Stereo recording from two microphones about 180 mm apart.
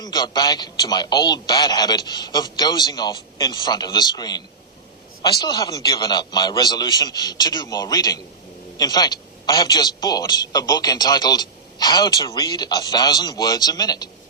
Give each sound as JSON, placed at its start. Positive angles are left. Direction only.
{"t": 0.0, "sound": "a man's voice", "side_deg": 20}